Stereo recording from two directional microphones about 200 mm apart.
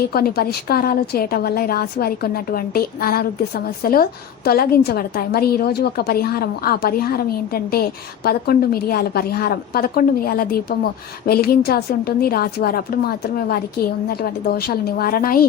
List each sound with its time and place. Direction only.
0.1 s a woman's voice: 50° left (ahead or behind)